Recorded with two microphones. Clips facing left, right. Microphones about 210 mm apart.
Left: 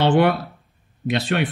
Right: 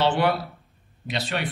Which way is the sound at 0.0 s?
55° left (ahead or behind).